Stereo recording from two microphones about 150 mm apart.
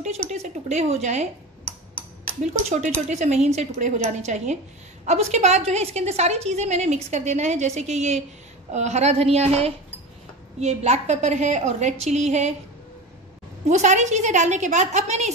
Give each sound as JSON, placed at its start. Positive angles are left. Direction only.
{"t": 0.0, "sound": "a woman's voice", "side_deg": -50}
{"t": 2.4, "sound": "a woman's voice", "side_deg": -50}
{"t": 13.7, "sound": "a woman's voice", "side_deg": -50}